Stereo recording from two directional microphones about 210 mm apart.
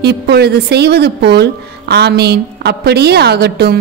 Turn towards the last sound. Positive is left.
turn(degrees=-50)  # may be behind; listen again after turning